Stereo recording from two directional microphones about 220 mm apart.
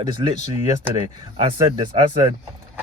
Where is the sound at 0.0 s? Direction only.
20° right (ahead or behind).